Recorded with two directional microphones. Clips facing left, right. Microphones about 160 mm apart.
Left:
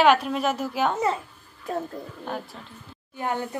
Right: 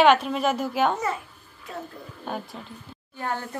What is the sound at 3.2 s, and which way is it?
Speech, 15° left (ahead or behind).